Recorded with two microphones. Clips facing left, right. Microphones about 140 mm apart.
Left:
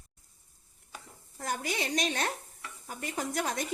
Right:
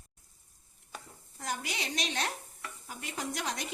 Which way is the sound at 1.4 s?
50° left (ahead or behind).